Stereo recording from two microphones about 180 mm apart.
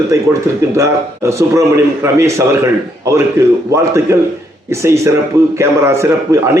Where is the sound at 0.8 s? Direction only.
15° right (ahead or behind).